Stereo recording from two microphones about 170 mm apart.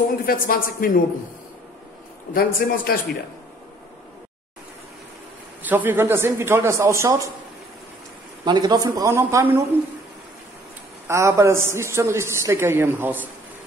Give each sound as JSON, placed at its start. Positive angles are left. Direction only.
{"t": 0.2, "sound": "a woman's voice", "side_deg": 60}
{"t": 2.3, "sound": "a woman's voice", "side_deg": 60}
{"t": 5.6, "sound": "a man's voice", "side_deg": -10}
{"t": 8.5, "sound": "speech", "side_deg": -25}
{"t": 11.1, "sound": "a man's voice", "side_deg": -15}